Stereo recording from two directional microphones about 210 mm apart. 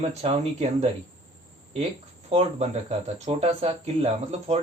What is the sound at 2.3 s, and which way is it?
Speech, 30° right (ahead or behind).